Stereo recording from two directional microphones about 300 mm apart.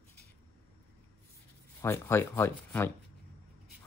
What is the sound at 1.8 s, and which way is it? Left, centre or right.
Speech, centre.